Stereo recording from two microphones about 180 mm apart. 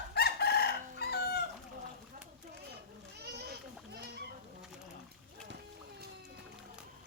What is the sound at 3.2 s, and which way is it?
Children playing, 65° right (ahead or behind).